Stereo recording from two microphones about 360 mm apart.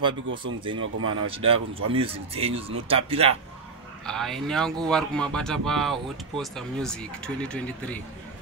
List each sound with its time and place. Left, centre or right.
0.0 s a man's voice: centre
0.7 s speech: right
1.2 s a man's voice: centre
4.0 s speech: centre